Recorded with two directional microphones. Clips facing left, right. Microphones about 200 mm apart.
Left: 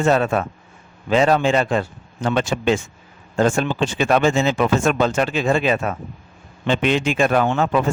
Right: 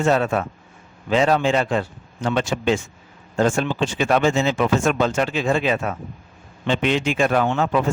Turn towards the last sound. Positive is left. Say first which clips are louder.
# left 1 dB
turn(degrees=55)  # may be behind; listen again after turning